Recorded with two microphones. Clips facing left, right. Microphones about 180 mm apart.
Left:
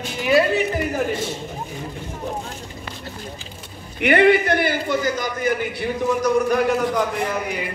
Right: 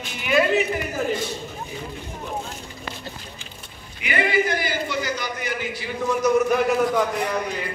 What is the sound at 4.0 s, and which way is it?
A man's voice, 65° left (ahead or behind).